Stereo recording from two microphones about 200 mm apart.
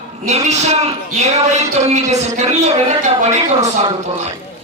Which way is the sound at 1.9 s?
35° right (ahead or behind).